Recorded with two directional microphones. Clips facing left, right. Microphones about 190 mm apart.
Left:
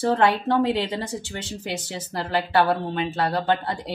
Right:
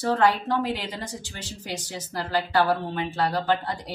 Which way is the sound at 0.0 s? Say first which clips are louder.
Left 2 dB; 25° left (ahead or behind).